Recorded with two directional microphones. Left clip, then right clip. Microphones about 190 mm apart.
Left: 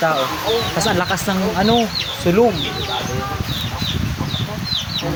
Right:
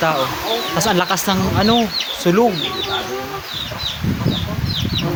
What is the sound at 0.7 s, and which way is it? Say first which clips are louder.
Speech: right 1 dB; 15° right (ahead or behind).